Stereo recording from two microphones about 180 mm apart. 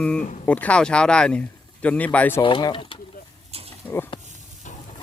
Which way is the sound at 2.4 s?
30° left (ahead or behind).